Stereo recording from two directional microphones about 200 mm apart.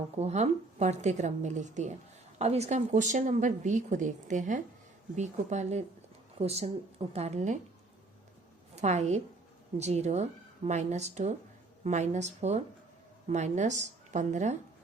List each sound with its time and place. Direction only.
0.2 s speech: 35° right (ahead or behind)
8.7 s a woman's voice: 35° right (ahead or behind)